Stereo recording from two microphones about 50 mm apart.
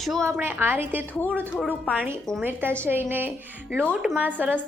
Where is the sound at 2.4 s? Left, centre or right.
Right.